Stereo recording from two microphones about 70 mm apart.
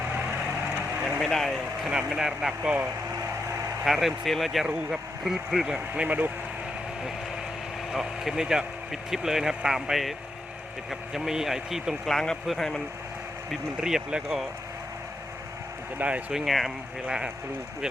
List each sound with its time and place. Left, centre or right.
1.2 s speech: centre
1.9 s speech: centre
3.8 s speech: centre
6.0 s speech: right
7.9 s speech: centre
12.0 s speech: centre
13.5 s speech: centre
16.0 s speech: right
16.3 s speech: centre